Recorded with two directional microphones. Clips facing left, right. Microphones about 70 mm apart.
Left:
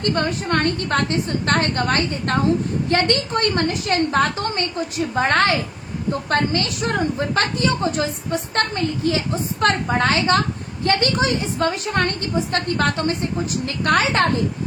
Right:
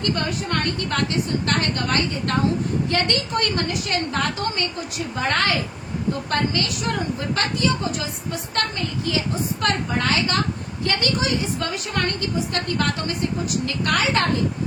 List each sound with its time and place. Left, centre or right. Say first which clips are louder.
0.1 s a woman's voice: left 4 dB; left